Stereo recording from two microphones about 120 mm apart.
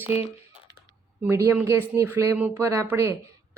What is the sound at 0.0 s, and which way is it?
Speech, 20° right (ahead or behind).